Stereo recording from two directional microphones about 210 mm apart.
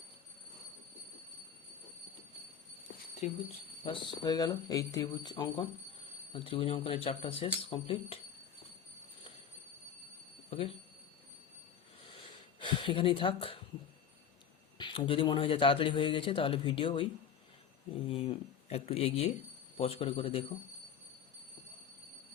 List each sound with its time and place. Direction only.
3.8 s a man's voice: 20° left (ahead or behind)
12.5 s speech: 20° left (ahead or behind)
14.8 s a man's voice: 25° left (ahead or behind)
18.1 s a man's voice: 25° left (ahead or behind)